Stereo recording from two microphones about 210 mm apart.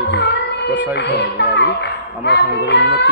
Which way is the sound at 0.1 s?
55° left (ahead or behind).